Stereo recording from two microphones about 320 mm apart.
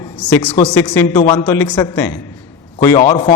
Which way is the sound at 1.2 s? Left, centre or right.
Centre.